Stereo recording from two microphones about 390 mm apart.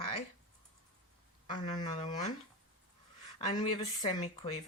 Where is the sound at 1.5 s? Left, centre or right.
Centre.